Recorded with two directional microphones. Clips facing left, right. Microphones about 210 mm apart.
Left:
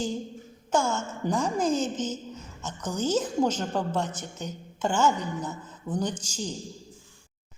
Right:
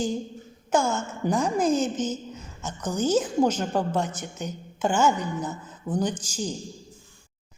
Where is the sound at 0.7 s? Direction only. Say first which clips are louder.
Right 2 dB; 10° right (ahead or behind).